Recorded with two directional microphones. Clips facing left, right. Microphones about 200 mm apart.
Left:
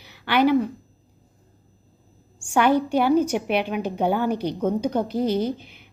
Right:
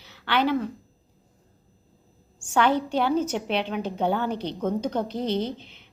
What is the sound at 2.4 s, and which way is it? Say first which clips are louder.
A woman's voice: left 3 dB; 10° left (ahead or behind).